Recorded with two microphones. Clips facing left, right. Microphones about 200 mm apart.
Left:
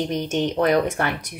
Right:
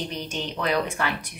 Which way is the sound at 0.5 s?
50° left (ahead or behind).